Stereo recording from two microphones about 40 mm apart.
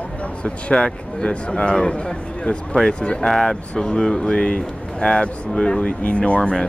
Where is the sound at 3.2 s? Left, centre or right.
Centre.